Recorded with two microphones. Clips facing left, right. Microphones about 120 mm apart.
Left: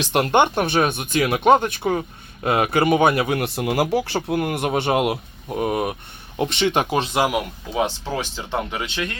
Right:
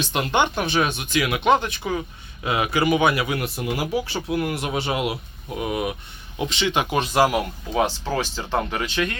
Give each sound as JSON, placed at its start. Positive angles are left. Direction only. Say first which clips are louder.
{"t": 0.0, "sound": "speech", "louder": "left 4 dB", "side_deg": 60}
{"t": 3.4, "sound": "speech", "louder": "left 5 dB", "side_deg": 65}
{"t": 4.4, "sound": "speech", "louder": "left 3 dB", "side_deg": 50}
{"t": 5.5, "sound": "speech", "louder": "left 3 dB", "side_deg": 40}
{"t": 6.4, "sound": "speech", "louder": "left 3 dB", "side_deg": 55}
{"t": 6.9, "sound": "speech", "louder": "right 1 dB", "side_deg": 25}